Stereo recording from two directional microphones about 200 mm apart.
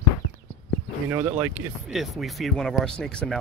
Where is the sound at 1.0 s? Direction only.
10° right (ahead or behind).